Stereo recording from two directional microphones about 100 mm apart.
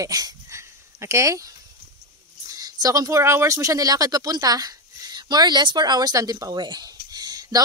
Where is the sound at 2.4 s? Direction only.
40° right (ahead or behind).